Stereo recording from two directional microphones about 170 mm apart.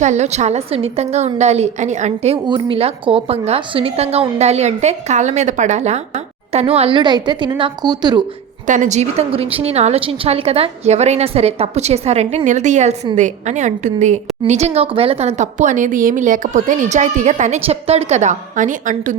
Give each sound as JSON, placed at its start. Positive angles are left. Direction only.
{"t": 0.0, "sound": "a woman's voice", "side_deg": -40}
{"t": 2.5, "sound": "a woman's voice", "side_deg": -30}
{"t": 8.6, "sound": "a woman's voice", "side_deg": -45}